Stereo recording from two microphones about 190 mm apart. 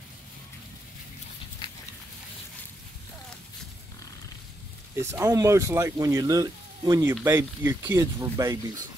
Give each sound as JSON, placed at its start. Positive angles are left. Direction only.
{"t": 5.0, "sound": "speech", "side_deg": -15}